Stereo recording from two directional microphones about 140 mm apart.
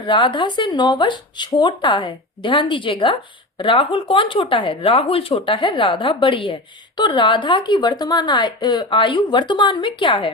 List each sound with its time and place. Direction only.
0.0 s speech: 35° left (ahead or behind)